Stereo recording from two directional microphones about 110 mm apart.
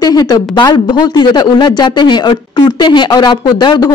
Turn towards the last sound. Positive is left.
turn(degrees=45)  # may be behind; listen again after turning